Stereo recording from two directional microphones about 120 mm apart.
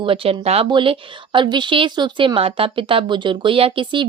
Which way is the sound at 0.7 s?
45° right (ahead or behind).